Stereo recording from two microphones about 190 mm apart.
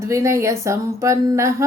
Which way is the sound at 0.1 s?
15° right (ahead or behind).